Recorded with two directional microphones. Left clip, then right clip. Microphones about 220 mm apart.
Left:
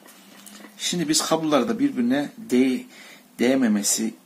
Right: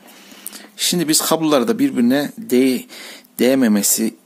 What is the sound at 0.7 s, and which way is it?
Speech, 50° right (ahead or behind).